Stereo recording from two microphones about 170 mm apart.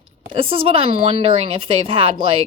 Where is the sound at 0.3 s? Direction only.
30° right (ahead or behind).